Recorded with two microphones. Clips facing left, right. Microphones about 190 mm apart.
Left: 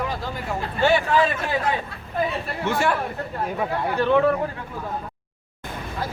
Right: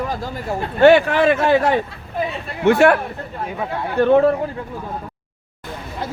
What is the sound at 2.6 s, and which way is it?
Speech, 65° right (ahead or behind).